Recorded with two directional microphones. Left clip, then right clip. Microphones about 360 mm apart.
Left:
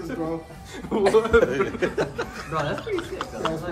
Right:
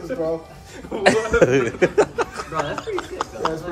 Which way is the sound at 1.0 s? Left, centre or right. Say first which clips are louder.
Right 2 dB; right.